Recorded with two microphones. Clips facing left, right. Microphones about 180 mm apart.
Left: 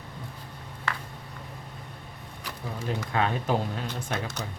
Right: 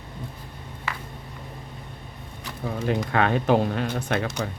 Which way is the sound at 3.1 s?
70° right (ahead or behind).